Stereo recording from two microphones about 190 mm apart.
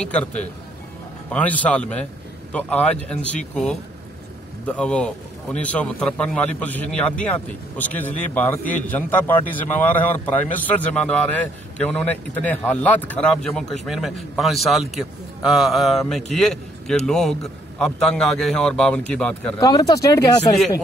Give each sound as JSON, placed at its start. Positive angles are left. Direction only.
{"t": 0.0, "sound": "a man's voice", "side_deg": 5}
{"t": 1.3, "sound": "a man's voice", "side_deg": 10}
{"t": 19.6, "sound": "speech", "side_deg": 20}